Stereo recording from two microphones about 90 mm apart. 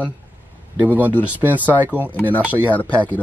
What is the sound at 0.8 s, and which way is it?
Speech, 20° right (ahead or behind).